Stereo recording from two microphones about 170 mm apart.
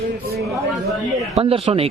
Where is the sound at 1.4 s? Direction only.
35° right (ahead or behind).